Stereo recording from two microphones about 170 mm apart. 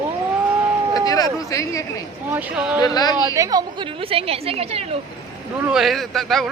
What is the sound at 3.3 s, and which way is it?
A woman's voice, 20° right (ahead or behind).